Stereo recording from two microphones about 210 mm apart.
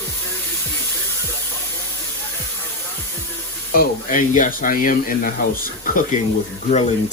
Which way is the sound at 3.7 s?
40° left (ahead or behind).